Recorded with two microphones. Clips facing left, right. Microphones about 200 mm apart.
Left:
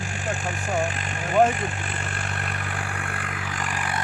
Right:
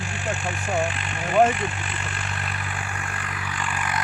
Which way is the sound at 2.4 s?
50° left (ahead or behind).